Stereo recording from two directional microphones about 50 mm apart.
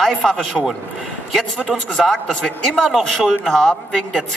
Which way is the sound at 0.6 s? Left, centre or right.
Left.